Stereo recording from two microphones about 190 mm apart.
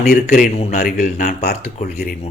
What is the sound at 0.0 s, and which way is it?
Speech, 50° left (ahead or behind).